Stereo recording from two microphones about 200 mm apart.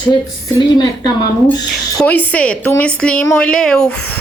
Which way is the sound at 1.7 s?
5° left (ahead or behind).